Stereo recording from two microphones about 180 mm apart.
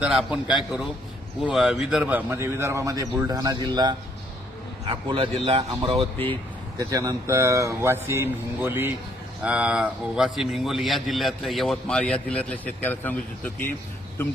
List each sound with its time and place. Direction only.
0.0 s a man's voice: 5° right (ahead or behind); by 6.1 s 30° right (ahead or behind)
6.7 s a man's voice: 20° right (ahead or behind); by 13.7 s 10° left (ahead or behind)